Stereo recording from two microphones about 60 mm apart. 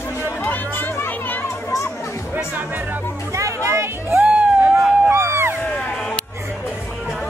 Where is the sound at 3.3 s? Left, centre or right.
Right.